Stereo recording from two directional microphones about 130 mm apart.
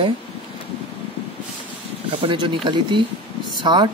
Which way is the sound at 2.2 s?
40° right (ahead or behind).